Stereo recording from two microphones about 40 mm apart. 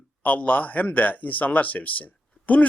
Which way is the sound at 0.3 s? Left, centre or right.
Left.